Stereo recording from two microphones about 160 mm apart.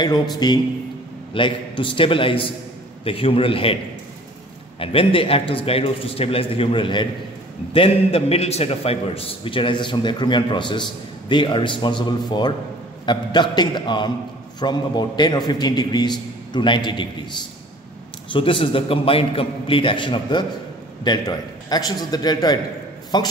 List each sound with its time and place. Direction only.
0.4 s a man's voice: 25° left (ahead or behind)
4.7 s a man's voice: 35° left (ahead or behind)